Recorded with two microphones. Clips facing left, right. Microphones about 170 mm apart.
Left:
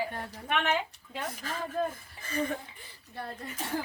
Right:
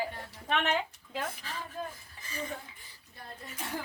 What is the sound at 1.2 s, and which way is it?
Speech, 45° left (ahead or behind).